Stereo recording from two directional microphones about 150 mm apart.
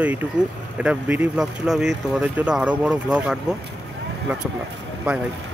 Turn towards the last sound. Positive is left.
turn(degrees=-5)  # may be behind; listen again after turning